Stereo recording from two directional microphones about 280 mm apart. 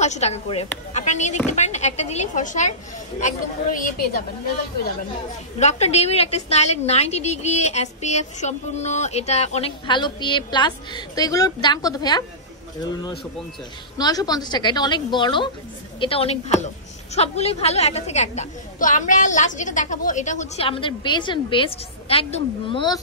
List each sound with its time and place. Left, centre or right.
0.0 s a woman's voice: left
5.6 s a woman's voice: left
13.9 s a woman's voice: centre